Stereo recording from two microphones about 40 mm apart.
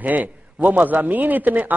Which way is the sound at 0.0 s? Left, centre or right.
Right.